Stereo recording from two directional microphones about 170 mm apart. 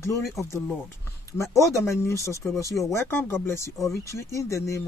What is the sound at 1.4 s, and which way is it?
Speech, 15° left (ahead or behind).